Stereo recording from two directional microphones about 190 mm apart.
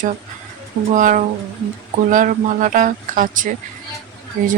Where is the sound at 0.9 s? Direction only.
40° right (ahead or behind).